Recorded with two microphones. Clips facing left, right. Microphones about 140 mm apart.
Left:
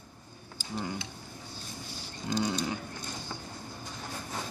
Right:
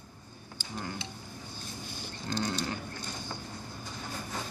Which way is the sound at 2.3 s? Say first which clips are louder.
Left 3 dB; 15° left (ahead or behind).